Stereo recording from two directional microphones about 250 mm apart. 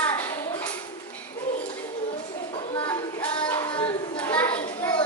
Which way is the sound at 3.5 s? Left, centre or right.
Centre.